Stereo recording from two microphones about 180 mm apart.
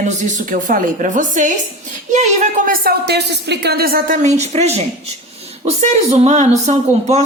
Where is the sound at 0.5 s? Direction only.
45° right (ahead or behind).